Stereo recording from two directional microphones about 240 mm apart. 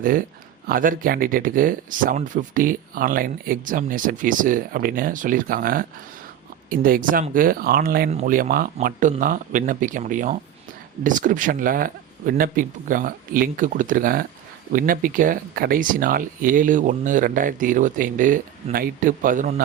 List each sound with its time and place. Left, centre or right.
0.0 s speech: right